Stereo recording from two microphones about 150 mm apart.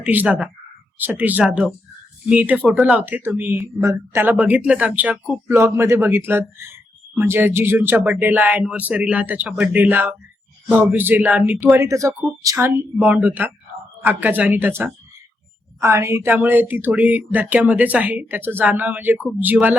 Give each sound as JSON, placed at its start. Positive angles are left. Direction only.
{"t": 0.0, "sound": "speech", "side_deg": -10}